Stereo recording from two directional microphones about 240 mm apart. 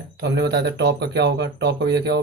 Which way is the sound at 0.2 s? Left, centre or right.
Right.